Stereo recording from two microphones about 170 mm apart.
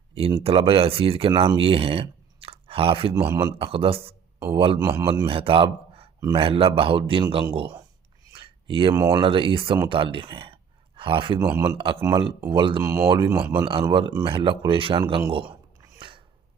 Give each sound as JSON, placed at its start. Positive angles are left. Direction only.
{"t": 0.1, "sound": "a man's voice", "side_deg": -35}
{"t": 3.2, "sound": "a man's voice", "side_deg": -20}
{"t": 3.6, "sound": "a man's voice", "side_deg": -35}
{"t": 8.4, "sound": "a sound", "side_deg": -30}
{"t": 9.0, "sound": "a man's voice", "side_deg": -25}
{"t": 16.0, "sound": "a sound", "side_deg": -30}